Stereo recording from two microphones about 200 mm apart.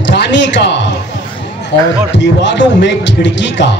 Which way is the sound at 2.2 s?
60° left (ahead or behind).